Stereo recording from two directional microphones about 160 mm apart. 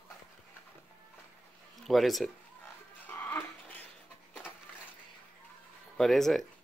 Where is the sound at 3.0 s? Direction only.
10° left (ahead or behind).